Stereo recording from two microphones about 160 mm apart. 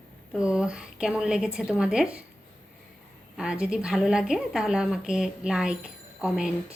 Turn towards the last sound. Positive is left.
turn(degrees=-5)  # may be behind; listen again after turning